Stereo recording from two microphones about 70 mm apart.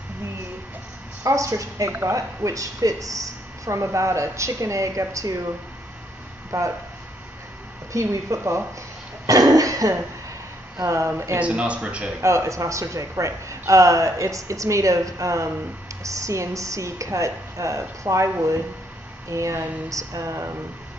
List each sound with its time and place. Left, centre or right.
1.2 s a woman's voice: right
1.9 s speech: right
2.1 s a woman's voice: right
3.8 s speech: right
6.5 s a woman's voice: right
7.9 s speech: right
9.2 s cough: right
10.8 s speech: right
11.3 s speech: centre
12.2 s speech: right
19.3 s speech: right